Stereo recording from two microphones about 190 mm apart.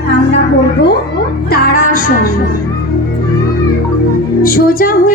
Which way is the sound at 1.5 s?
55° left (ahead or behind).